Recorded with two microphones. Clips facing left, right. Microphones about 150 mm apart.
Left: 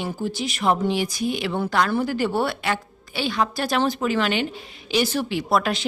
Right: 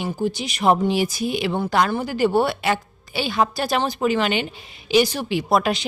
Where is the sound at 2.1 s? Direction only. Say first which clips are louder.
Right 4 dB; 5° right (ahead or behind).